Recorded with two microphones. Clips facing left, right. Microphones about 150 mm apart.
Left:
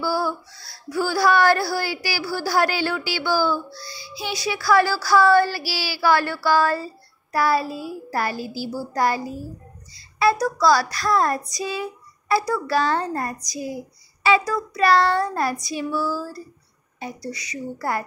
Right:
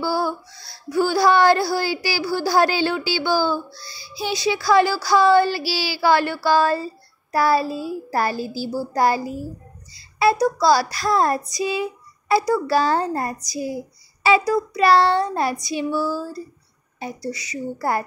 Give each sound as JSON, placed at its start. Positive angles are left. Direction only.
{"t": 0.0, "sound": "speech", "side_deg": -25}
{"t": 10.4, "sound": "speech", "side_deg": -25}